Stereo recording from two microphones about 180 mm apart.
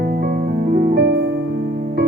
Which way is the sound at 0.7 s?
70° right (ahead or behind).